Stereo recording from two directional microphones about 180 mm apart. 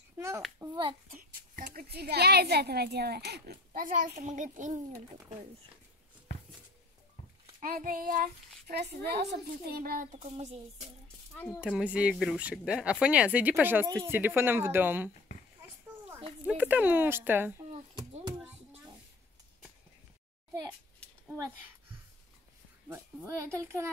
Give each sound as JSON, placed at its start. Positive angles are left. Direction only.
{"t": 0.6, "sound": "a child's voice", "side_deg": -25}
{"t": 1.1, "sound": "a child's voice", "side_deg": -55}
{"t": 7.6, "sound": "a child's voice", "side_deg": -50}
{"t": 10.2, "sound": "speech", "side_deg": -35}
{"t": 11.6, "sound": "speech", "side_deg": -5}
{"t": 16.4, "sound": "speech", "side_deg": -10}
{"t": 21.0, "sound": "a sound", "side_deg": 5}
{"t": 22.8, "sound": "speech", "side_deg": -15}